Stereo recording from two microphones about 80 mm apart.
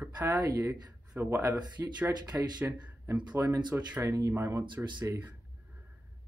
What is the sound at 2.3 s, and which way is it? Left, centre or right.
Speech, right.